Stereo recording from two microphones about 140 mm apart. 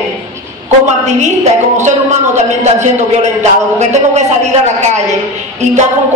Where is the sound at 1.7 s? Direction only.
55° right (ahead or behind).